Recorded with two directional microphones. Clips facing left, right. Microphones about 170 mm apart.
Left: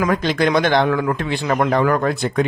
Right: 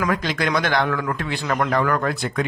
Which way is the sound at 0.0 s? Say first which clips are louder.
Left 5 dB; 25° left (ahead or behind).